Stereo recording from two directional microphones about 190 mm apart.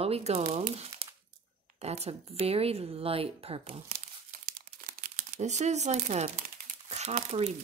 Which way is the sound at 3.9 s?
50° right (ahead or behind).